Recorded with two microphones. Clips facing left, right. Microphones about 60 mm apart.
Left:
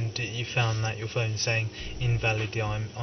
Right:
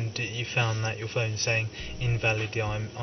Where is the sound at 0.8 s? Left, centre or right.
Centre.